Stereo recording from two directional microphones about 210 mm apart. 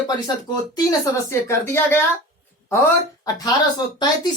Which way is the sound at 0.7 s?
15° left (ahead or behind).